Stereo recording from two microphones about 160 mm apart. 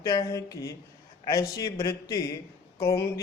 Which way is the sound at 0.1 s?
20° left (ahead or behind).